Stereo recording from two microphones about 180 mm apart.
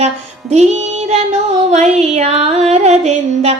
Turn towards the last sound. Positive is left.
turn(degrees=-40)  # may be behind; listen again after turning